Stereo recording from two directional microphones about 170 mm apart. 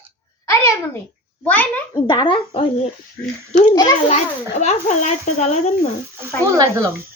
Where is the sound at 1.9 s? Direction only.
25° left (ahead or behind).